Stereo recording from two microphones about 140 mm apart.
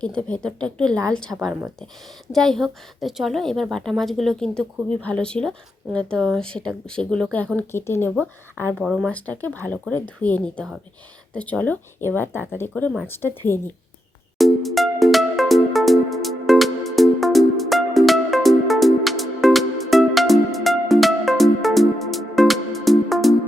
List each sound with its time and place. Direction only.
0.0 s a woman's voice: 5° left (ahead or behind)
8.8 s a woman's voice: centre (ahead or behind)
9.0 s speech: 10° left (ahead or behind)
14.3 s music: centre (ahead or behind)